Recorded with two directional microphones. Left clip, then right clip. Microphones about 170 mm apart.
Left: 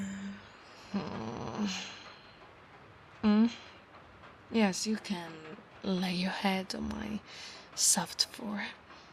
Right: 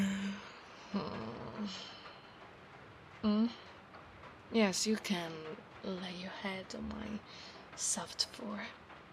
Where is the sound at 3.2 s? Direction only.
20° left (ahead or behind).